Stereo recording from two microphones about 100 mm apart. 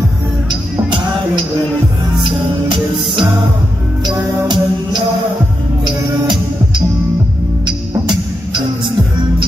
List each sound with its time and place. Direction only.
0.5 s music: 55° right (ahead or behind)
7.6 s music: 50° right (ahead or behind)